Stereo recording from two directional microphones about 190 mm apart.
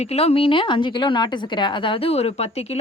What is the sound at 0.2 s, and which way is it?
A woman's voice, 30° left (ahead or behind).